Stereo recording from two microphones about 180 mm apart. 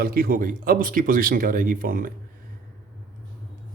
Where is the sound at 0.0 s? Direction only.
55° right (ahead or behind).